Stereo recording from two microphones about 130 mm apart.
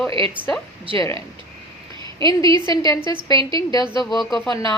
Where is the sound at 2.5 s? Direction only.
40° right (ahead or behind).